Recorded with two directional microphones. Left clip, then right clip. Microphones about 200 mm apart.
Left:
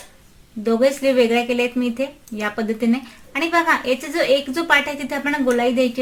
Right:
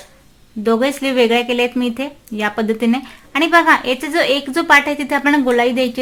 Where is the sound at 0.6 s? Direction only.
40° right (ahead or behind).